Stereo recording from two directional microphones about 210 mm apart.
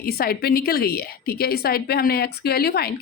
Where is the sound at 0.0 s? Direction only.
45° left (ahead or behind).